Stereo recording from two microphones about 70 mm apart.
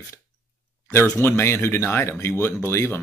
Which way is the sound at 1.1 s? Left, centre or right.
Left.